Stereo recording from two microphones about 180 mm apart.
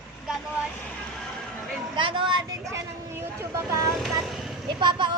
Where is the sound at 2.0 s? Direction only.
25° right (ahead or behind).